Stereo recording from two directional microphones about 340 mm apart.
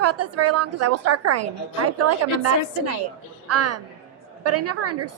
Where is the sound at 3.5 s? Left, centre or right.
Right.